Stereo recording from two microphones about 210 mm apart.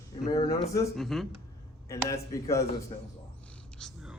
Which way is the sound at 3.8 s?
Centre (ahead or behind).